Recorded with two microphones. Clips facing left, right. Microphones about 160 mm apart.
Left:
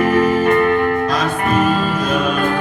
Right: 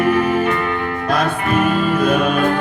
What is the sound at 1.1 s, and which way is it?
Music, 60° right (ahead or behind).